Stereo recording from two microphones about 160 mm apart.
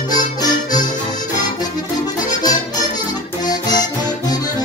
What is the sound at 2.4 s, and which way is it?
Music, 25° left (ahead or behind).